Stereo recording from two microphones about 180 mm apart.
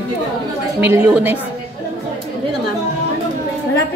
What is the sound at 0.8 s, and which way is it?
Speech, 10° right (ahead or behind).